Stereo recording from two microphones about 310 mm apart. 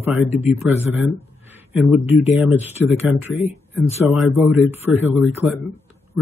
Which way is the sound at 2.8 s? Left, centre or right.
Centre.